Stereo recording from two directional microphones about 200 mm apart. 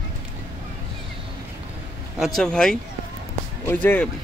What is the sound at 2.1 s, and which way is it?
Speech, centre (ahead or behind).